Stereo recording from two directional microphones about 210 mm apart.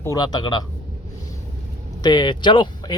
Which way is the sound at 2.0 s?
20° left (ahead or behind).